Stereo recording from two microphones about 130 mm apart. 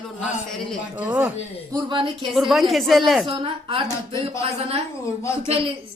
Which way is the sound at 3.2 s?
40° right (ahead or behind).